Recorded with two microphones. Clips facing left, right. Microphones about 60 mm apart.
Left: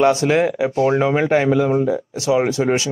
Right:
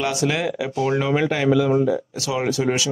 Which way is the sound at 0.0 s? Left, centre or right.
Left.